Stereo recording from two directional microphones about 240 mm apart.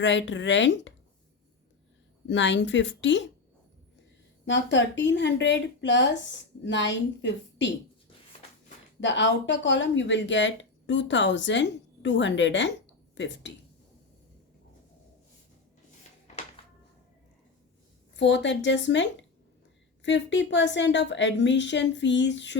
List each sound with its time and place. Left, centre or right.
0.0 s speech: left
2.2 s speech: left
4.4 s speech: left
9.0 s speech: left
18.2 s speech: left